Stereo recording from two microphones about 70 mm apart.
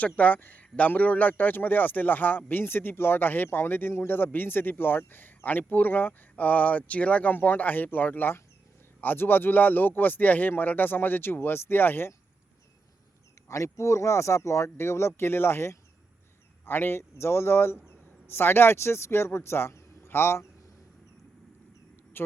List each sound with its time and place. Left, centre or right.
0.0 s speech: left
13.5 s speech: left